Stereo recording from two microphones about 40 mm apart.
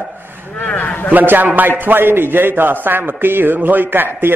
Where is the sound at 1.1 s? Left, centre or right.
Right.